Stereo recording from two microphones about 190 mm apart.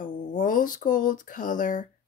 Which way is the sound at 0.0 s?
45° left (ahead or behind).